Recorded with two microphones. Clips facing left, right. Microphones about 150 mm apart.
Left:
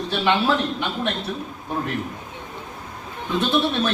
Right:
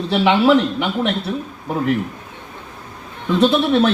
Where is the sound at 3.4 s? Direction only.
90° right.